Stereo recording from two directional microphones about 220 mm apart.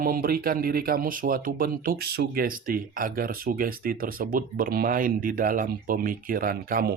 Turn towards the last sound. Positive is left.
turn(degrees=-40)  # may be behind; listen again after turning